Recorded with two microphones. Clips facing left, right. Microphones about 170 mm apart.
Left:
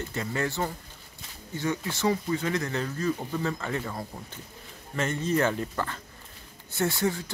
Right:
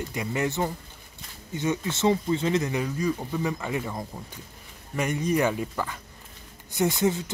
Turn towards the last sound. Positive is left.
turn(degrees=-20)  # may be behind; listen again after turning